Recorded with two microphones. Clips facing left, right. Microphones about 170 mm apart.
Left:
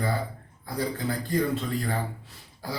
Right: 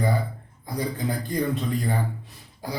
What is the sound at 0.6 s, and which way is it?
Speech, 15° right (ahead or behind).